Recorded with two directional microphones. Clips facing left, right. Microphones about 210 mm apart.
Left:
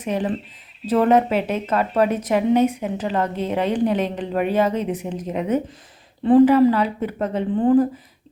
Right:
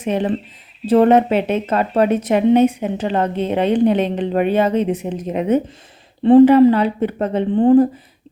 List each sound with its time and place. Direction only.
0.0 s speech: 25° right (ahead or behind)